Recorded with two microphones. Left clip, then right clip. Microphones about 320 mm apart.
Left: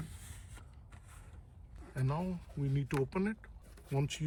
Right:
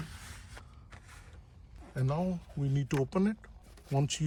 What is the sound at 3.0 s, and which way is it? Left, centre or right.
Speech, centre.